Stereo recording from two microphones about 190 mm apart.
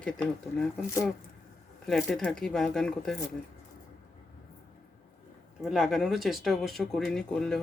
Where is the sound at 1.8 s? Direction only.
Centre (ahead or behind).